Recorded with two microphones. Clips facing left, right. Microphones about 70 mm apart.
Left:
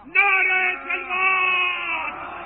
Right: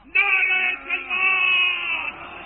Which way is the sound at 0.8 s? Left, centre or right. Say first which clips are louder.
Left 2 dB; left.